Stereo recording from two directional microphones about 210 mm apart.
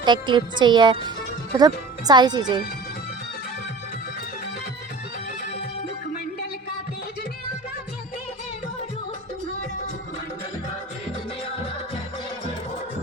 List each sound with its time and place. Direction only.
0.0 s speech: 20° right (ahead or behind)